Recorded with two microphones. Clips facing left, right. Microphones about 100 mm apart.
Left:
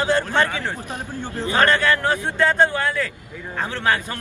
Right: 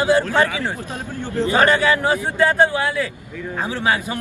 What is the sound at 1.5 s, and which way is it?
A man's voice, 10° right (ahead or behind).